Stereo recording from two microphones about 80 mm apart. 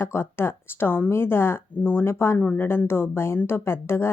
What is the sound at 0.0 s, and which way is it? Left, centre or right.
A woman's voice, left.